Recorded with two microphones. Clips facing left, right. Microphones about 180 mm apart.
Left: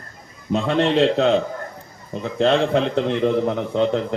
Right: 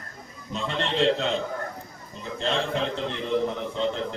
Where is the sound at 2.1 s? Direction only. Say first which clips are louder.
Left 11 dB; 75° left (ahead or behind).